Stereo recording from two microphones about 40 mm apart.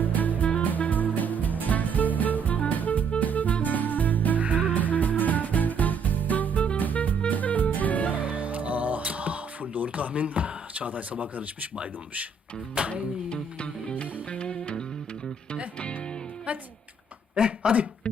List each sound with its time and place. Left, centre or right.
0.0 s music: left
4.4 s music: right
4.7 s music: left
8.1 s music: right
13.3 s music: left
16.5 s music: right
17.3 s a sound: right